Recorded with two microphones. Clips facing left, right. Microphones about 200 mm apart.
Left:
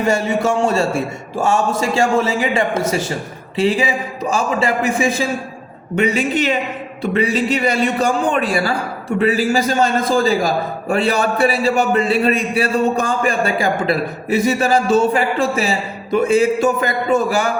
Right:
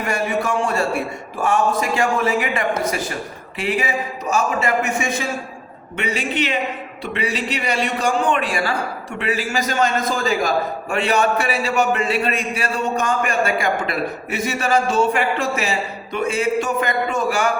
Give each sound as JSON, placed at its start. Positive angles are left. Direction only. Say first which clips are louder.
{"t": 0.0, "sound": "a man's voice", "louder": "left 5 dB", "side_deg": 25}